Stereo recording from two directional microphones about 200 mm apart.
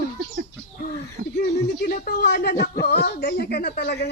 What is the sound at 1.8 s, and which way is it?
Speech, 40° left (ahead or behind).